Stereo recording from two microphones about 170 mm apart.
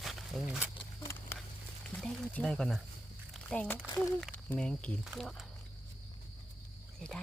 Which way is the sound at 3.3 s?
5° left (ahead or behind).